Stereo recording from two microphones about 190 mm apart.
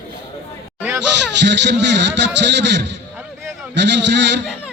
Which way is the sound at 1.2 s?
65° right (ahead or behind).